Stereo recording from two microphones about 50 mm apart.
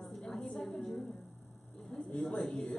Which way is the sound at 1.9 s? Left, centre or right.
Centre.